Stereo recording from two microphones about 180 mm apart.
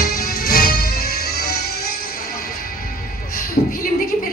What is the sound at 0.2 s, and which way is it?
Music, 55° left (ahead or behind).